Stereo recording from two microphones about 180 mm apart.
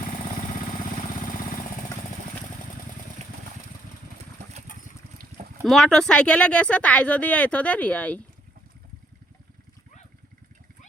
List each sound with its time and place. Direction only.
4.4 s engine: 40° right (ahead or behind)
5.6 s speech: centre (ahead or behind)